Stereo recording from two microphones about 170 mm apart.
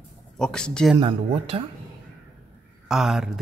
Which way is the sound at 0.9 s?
30° right (ahead or behind).